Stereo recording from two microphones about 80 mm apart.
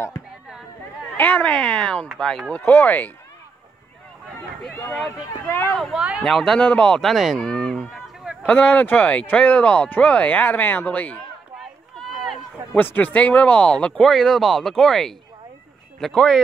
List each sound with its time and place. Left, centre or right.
1.1 s speech: centre
2.5 s speech: left
5.0 s speech: left
5.9 s speech: centre
6.2 s speech: centre
12.7 s speech: left; by 16.3 s centre